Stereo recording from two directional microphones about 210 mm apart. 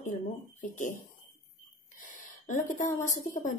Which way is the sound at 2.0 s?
35° left (ahead or behind).